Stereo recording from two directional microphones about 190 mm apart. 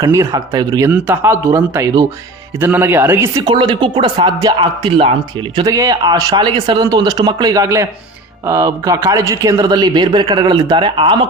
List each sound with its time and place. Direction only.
0.0 s speech: 15° right (ahead or behind)
0.9 s speech: 10° right (ahead or behind); by 11.3 s 25° right (ahead or behind)